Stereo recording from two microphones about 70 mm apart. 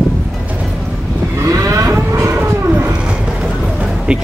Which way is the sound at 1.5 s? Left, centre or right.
Right.